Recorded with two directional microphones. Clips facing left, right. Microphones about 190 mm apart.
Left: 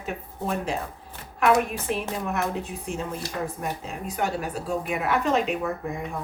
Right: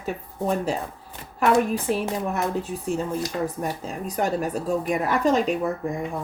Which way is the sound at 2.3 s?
35° right (ahead or behind).